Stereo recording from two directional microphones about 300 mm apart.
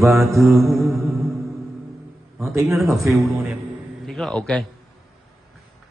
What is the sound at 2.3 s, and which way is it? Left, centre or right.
A man's voice, centre.